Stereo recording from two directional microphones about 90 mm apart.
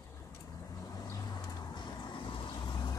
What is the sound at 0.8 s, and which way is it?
Vehicle, 45° left (ahead or behind).